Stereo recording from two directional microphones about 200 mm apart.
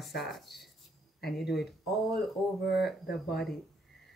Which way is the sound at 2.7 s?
Centre (ahead or behind).